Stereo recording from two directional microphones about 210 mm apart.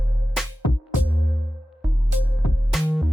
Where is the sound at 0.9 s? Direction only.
10° right (ahead or behind).